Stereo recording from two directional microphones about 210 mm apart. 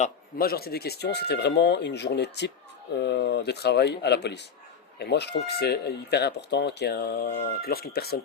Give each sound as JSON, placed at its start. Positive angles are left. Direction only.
{"t": 0.0, "sound": "speech", "side_deg": 45}